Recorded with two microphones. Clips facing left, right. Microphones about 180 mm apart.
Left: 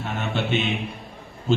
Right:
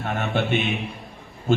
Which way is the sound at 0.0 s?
50° right (ahead or behind).